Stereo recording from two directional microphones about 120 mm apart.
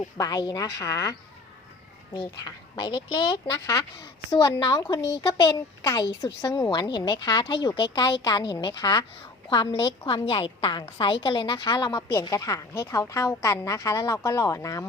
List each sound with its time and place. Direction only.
0.2 s a woman's voice: 35° left (ahead or behind)
2.8 s speech: 40° left (ahead or behind)
3.7 s a woman's voice: 30° left (ahead or behind)